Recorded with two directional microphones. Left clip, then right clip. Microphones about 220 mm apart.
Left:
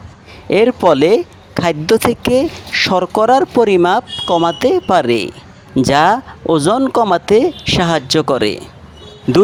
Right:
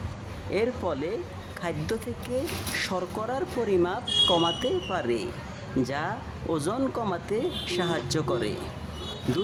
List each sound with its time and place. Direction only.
0.5 s speech: 40° left (ahead or behind)